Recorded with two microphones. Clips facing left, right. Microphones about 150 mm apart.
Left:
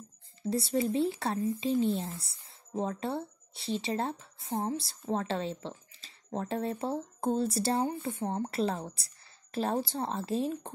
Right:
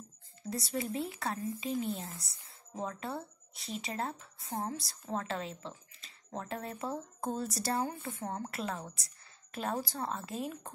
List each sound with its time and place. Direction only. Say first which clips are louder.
0.5 s speech: left 7 dB; 25° left (ahead or behind)